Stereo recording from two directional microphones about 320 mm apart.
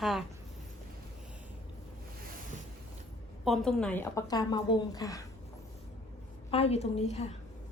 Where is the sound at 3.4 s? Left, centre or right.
Centre.